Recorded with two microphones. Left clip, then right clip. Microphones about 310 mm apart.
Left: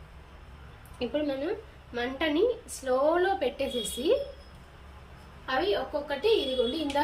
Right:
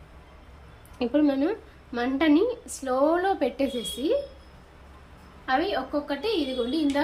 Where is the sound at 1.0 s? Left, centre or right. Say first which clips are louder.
Right 6 dB; centre.